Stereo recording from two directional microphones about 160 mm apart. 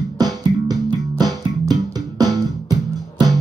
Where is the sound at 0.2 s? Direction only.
25° right (ahead or behind).